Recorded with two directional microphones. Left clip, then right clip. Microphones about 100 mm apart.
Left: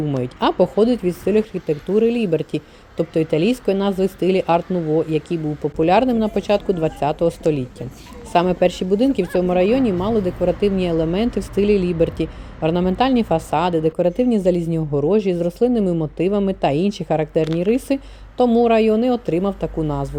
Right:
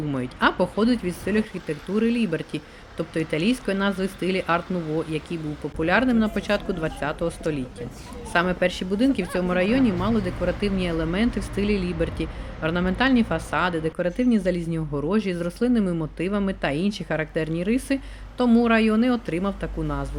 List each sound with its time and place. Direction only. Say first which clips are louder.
0.1 s speech: even; 45° left (ahead or behind)
14.8 s speech: left 8 dB; 5° left (ahead or behind)
15.1 s speech: left 6 dB; 40° left (ahead or behind)